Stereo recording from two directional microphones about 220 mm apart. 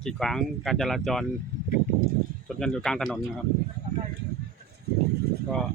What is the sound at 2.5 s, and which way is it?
Speech, 5° left (ahead or behind).